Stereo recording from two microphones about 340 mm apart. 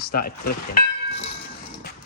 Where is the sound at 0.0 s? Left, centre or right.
Left.